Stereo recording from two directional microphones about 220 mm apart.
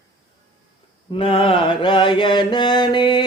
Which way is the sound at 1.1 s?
25° left (ahead or behind).